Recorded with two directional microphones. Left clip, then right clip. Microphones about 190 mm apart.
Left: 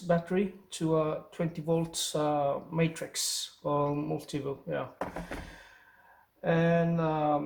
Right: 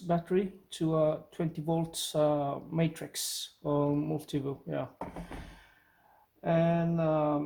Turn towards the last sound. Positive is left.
turn(degrees=-55)  # may be behind; listen again after turning